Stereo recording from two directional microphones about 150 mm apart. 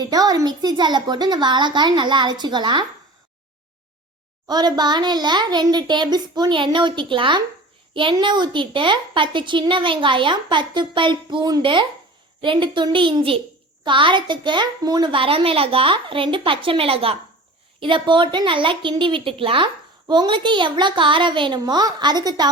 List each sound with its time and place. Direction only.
0.0 s a child's voice: 25° right (ahead or behind)
4.4 s a child's voice: 25° right (ahead or behind)